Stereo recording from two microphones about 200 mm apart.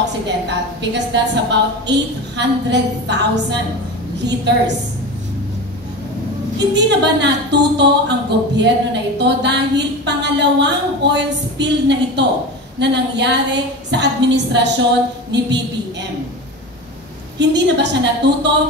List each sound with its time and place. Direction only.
0.5 s a woman's voice: 60° right (ahead or behind)
6.7 s a woman's voice: 60° right (ahead or behind)
17.4 s a woman's voice: 60° right (ahead or behind)